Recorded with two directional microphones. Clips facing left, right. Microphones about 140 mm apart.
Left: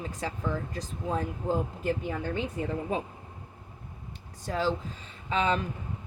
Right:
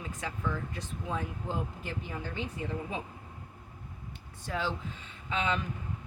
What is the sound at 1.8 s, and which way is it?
Speech, 50° left (ahead or behind).